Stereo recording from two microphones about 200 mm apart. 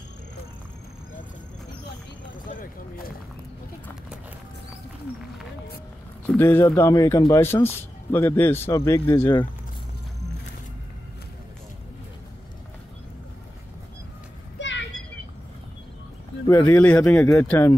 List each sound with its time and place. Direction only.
6.2 s a man's voice: 10° left (ahead or behind)
14.6 s children playing: 65° left (ahead or behind)
16.4 s a man's voice: 10° left (ahead or behind)